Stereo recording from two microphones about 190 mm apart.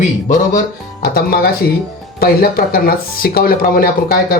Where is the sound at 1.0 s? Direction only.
55° left (ahead or behind).